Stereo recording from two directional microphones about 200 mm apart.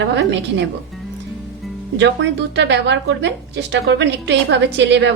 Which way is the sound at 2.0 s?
60° right (ahead or behind).